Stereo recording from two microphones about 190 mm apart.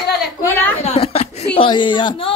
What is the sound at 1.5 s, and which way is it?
Speech, 25° left (ahead or behind).